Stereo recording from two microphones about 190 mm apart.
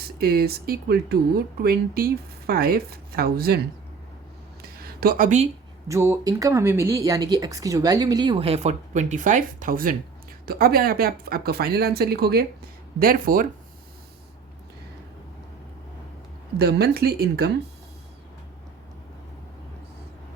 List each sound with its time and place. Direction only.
0.2 s speech: 55° right (ahead or behind)
4.8 s speech: 50° right (ahead or behind)
5.9 s speech: 15° right (ahead or behind); by 13.5 s 45° right (ahead or behind)
16.6 s speech: 55° right (ahead or behind)